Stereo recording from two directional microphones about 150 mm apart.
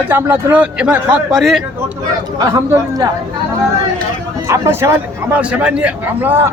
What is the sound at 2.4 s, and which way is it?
Speech, 25° right (ahead or behind).